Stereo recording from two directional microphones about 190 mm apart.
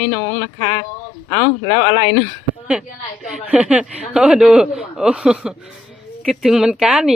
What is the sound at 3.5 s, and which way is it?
A man's voice, 5° right (ahead or behind).